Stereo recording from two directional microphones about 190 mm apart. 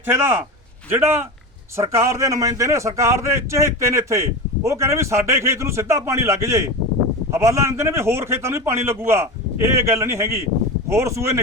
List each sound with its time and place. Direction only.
0.9 s a man's voice: 10° right (ahead or behind)